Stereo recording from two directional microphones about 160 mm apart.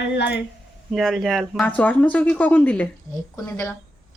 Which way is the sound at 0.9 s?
Centre (ahead or behind).